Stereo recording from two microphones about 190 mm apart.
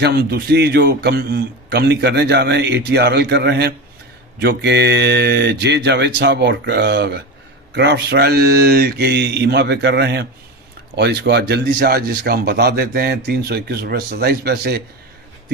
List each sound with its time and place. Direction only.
0.0 s speech: 55° right (ahead or behind)